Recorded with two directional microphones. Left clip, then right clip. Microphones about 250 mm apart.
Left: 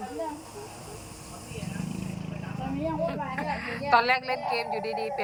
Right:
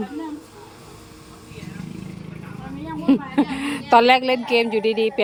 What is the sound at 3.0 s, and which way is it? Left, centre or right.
A woman's voice, right.